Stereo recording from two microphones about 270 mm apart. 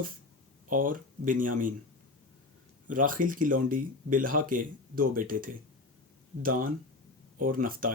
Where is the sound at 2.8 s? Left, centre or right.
Right.